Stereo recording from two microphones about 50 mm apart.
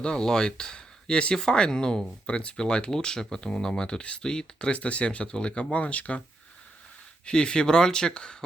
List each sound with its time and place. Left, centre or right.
0.0 s speech: centre
4.7 s speech: left
7.3 s speech: centre